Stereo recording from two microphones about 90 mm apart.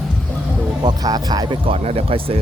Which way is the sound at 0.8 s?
50° right (ahead or behind).